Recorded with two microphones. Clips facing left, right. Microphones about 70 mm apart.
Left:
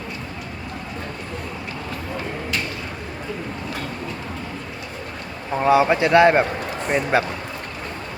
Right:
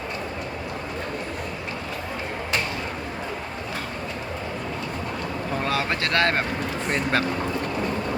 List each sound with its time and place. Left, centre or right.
5.5 s speech: centre